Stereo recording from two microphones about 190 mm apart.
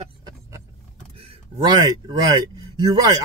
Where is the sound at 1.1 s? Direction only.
30° right (ahead or behind).